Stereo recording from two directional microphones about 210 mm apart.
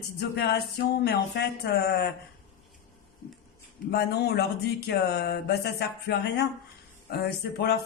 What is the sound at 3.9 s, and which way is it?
Speech, 50° left (ahead or behind).